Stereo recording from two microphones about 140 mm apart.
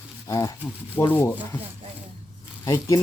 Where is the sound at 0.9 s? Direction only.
15° left (ahead or behind).